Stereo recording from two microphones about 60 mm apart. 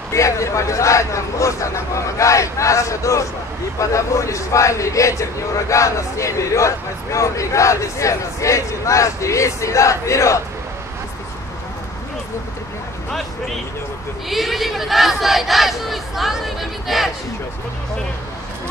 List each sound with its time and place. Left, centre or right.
0.1 s speech: left
14.3 s speech: centre